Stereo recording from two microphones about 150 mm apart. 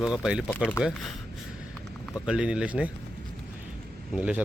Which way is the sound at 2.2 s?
5° right (ahead or behind).